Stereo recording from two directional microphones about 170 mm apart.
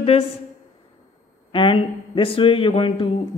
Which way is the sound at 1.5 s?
30° left (ahead or behind).